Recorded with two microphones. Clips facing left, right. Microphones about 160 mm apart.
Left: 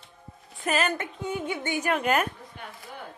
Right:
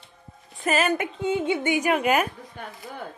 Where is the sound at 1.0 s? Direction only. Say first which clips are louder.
Right 6 dB; 20° right (ahead or behind); by 2.3 s 5° right (ahead or behind).